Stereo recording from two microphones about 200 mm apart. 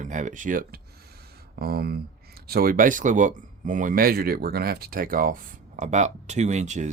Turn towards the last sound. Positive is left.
turn(degrees=-35)  # may be behind; listen again after turning